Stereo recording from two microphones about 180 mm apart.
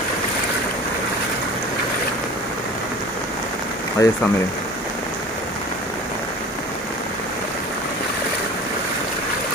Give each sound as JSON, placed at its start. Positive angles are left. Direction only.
{"t": 4.0, "sound": "speech", "side_deg": 20}